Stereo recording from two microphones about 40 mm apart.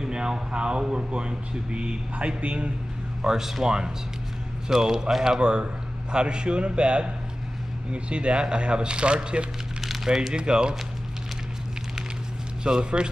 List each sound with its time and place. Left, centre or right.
0.0 s speech: centre
3.2 s a man's voice: centre
9.8 s a sound: centre
10.4 s speech: right
12.6 s speech: right